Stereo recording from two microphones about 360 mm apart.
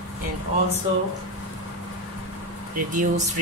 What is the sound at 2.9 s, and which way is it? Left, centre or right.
Speech, right.